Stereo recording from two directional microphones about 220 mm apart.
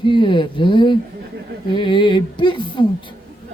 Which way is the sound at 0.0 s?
20° left (ahead or behind).